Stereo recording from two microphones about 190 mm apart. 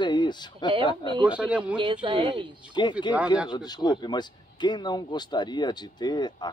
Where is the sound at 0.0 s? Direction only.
25° left (ahead or behind).